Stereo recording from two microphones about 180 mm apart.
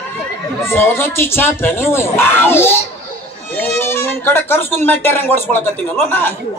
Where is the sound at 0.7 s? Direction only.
15° left (ahead or behind).